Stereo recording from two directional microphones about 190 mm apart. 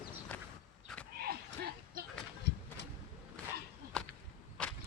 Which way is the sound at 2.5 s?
65° left (ahead or behind).